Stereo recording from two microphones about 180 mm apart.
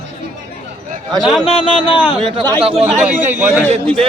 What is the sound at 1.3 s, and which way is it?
Speech, 30° left (ahead or behind).